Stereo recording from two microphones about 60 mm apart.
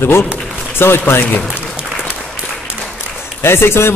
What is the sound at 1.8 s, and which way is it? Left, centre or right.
Applause, centre.